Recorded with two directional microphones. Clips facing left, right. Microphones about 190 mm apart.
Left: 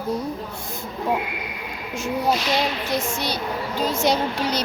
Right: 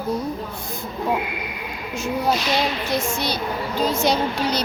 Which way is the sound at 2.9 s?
20° left (ahead or behind).